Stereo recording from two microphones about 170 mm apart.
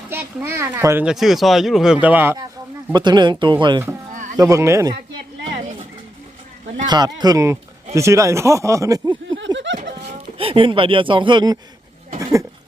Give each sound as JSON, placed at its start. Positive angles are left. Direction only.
{"t": 0.1, "sound": "speech", "side_deg": -10}
{"t": 1.0, "sound": "speech", "side_deg": 0}
{"t": 2.9, "sound": "speech", "side_deg": -25}
{"t": 4.1, "sound": "a sound", "side_deg": -50}
{"t": 4.4, "sound": "speech", "side_deg": -15}
{"t": 6.8, "sound": "speech", "side_deg": -25}
{"t": 9.3, "sound": "snicker", "side_deg": -90}
{"t": 10.1, "sound": "speech", "side_deg": -35}